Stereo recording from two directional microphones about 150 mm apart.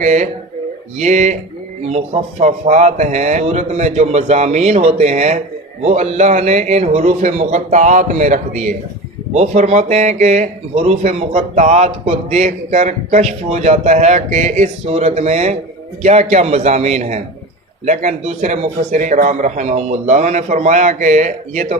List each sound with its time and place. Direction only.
0.0 s speech: 50° right (ahead or behind)
2.4 s speech: 50° right (ahead or behind)